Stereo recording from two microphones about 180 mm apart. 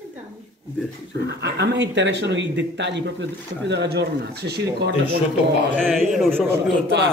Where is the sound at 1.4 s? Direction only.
75° right (ahead or behind).